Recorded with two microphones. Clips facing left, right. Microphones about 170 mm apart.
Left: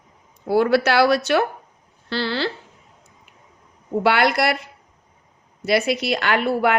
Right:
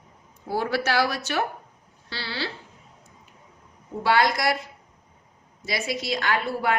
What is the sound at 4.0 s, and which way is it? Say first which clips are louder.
Speech: left 4 dB; 65° left (ahead or behind).